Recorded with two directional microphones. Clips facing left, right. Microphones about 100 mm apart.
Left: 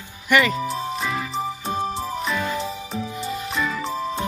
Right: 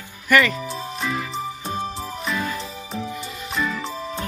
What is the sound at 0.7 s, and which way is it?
Music, centre (ahead or behind).